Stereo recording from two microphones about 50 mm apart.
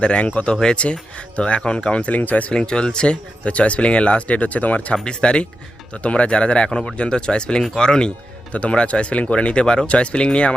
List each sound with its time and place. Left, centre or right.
0.0 s speech: left
2.6 s speech: centre
5.0 s speech: centre